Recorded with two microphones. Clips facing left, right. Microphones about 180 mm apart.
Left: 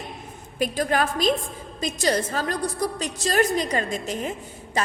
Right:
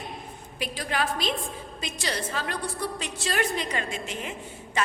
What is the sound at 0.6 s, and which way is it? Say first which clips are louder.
A woman's voice: left 7 dB; 45° left (ahead or behind).